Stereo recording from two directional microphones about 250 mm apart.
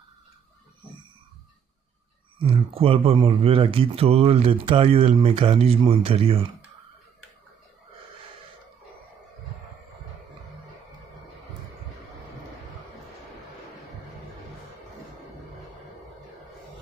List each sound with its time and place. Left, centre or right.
2.4 s speech: right